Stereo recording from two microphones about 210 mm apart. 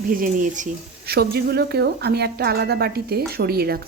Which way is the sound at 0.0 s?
40° right (ahead or behind).